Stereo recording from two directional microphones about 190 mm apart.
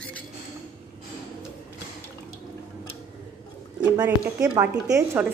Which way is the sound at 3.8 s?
20° right (ahead or behind).